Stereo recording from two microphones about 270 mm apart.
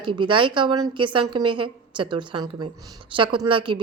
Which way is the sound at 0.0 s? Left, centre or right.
Centre.